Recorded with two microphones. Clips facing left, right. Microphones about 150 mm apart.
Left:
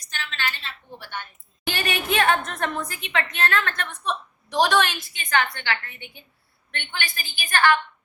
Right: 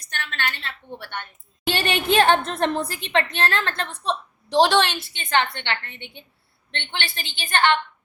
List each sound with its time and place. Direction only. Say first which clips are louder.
0.0 s a sound: right 2 dB; 60° right (ahead or behind)
0.9 s a woman's voice: right 1 dB; 60° right (ahead or behind)
1.6 s a woman's voice: right 4 dB; 30° right (ahead or behind)